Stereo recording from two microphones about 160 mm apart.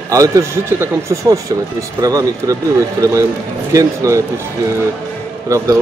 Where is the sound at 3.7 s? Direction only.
20° right (ahead or behind).